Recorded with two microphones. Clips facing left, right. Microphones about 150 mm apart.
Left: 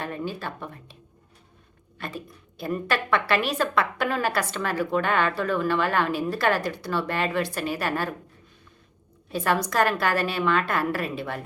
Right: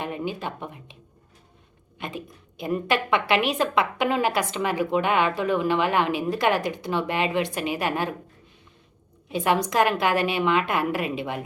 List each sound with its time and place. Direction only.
0.0 s speech: 15° right (ahead or behind)
2.0 s a woman's voice: 20° right (ahead or behind)
9.3 s a woman's voice: 15° right (ahead or behind)